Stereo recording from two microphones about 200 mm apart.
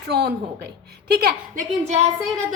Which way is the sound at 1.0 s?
50° right (ahead or behind).